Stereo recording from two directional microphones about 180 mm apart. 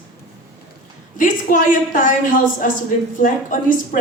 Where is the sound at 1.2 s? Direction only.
45° left (ahead or behind).